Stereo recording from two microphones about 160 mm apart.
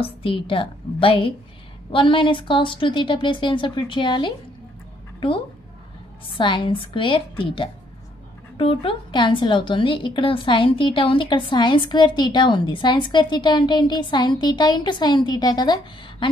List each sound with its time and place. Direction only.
0.0 s speech: 35° left (ahead or behind)
6.3 s a woman's voice: 30° left (ahead or behind)